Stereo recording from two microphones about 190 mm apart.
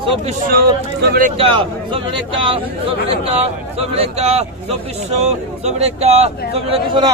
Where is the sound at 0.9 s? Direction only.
60° right (ahead or behind).